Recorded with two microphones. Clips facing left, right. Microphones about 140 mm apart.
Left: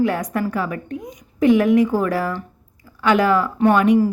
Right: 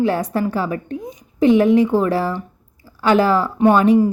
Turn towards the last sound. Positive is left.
turn(degrees=-30)  # may be behind; listen again after turning